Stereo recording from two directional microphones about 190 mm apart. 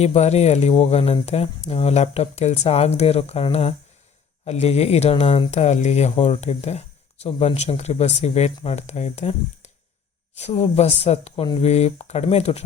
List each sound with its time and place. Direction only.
0.0 s speech: 35° left (ahead or behind)